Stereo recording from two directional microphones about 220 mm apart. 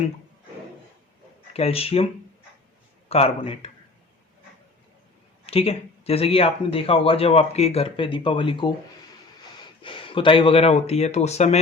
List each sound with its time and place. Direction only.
1.5 s speech: 25° left (ahead or behind)
3.1 s speech: 25° left (ahead or behind)
5.5 s speech: 25° left (ahead or behind)